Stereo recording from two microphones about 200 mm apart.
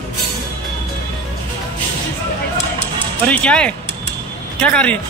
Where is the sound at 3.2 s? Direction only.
5° left (ahead or behind).